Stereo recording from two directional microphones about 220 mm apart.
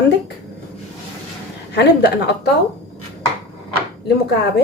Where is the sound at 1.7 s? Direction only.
50° left (ahead or behind).